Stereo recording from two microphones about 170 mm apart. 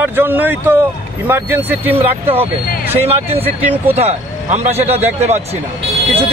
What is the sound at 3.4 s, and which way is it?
Speech, 10° right (ahead or behind).